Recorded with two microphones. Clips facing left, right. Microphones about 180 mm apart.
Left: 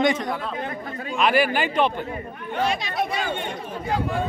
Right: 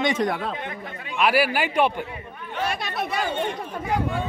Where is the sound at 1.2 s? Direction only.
5° right (ahead or behind).